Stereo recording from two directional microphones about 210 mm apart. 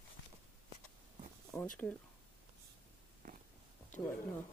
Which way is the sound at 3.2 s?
40° right (ahead or behind).